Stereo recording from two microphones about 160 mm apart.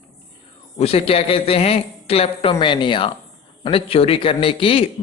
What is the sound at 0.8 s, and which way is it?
Speech, 40° left (ahead or behind).